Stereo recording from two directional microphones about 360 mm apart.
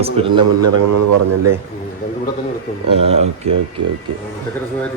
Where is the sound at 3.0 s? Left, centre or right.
Centre.